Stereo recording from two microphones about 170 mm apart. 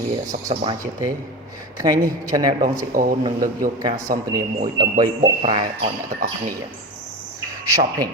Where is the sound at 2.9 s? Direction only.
55° right (ahead or behind).